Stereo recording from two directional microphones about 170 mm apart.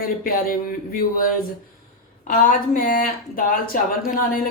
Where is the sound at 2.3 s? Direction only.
55° left (ahead or behind).